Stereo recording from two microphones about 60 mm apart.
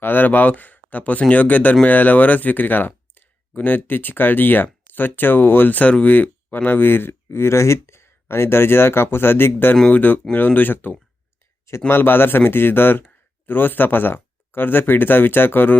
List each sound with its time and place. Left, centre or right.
0.0 s speech: left
7.3 s speech: left